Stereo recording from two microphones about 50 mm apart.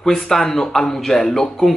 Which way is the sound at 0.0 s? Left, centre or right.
Centre.